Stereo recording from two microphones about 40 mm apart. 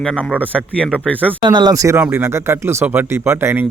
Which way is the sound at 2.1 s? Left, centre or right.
Right.